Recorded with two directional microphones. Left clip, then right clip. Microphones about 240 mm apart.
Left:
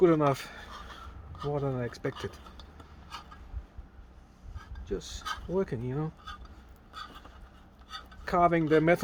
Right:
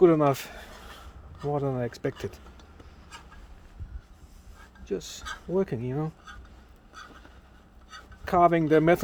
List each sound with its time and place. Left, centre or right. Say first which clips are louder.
0.0 s a sound: right 4 dB; right
1.5 s speech: right 4 dB; right
4.9 s speech: right 2 dB; right
8.2 s speech: right 4 dB; right